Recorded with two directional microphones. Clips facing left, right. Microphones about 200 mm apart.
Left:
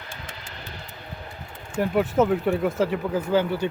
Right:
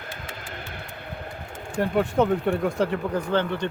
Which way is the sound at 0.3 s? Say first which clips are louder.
Right 3 dB; 55° right (ahead or behind).